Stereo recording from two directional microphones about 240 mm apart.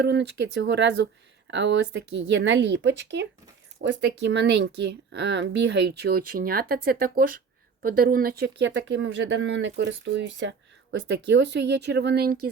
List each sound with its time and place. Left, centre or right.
0.0 s speech: right